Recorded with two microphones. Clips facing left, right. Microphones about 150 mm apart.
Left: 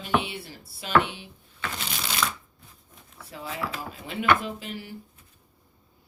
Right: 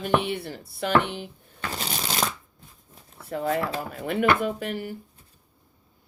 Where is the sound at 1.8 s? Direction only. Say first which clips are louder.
Right 2 dB; 40° right (ahead or behind).